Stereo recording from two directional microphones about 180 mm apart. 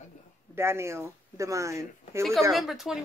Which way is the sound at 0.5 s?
15° right (ahead or behind).